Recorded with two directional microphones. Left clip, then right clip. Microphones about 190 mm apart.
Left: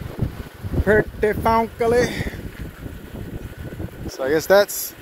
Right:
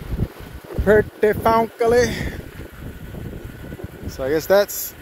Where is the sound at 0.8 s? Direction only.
20° right (ahead or behind).